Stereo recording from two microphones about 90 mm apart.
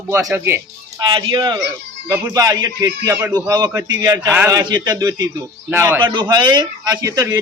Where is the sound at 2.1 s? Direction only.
30° right (ahead or behind).